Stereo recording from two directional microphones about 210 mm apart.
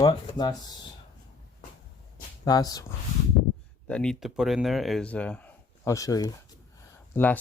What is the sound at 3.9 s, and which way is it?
Speech, 5° left (ahead or behind).